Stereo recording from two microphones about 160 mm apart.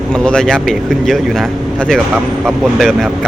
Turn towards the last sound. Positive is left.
turn(degrees=5)  # may be behind; listen again after turning